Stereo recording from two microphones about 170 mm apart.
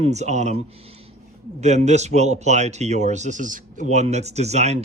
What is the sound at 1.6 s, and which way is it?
Speech, 40° right (ahead or behind).